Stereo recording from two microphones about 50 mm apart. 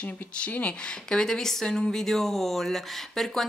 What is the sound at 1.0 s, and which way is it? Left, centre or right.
Speech, centre.